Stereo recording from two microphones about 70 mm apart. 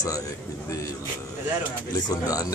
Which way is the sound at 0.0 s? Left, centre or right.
Left.